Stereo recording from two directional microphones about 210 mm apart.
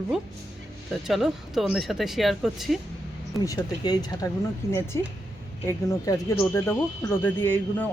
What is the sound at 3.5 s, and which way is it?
Speech, 20° left (ahead or behind).